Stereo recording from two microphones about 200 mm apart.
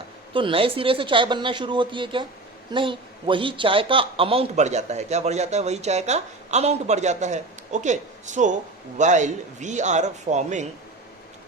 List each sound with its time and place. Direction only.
0.3 s a man's voice: 25° right (ahead or behind)